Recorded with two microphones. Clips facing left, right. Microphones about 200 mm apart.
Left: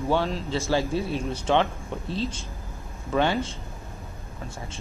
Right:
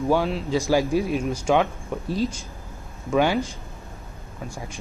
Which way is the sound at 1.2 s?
30° left (ahead or behind).